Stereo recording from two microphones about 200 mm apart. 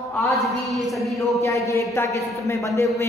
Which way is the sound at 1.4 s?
15° left (ahead or behind).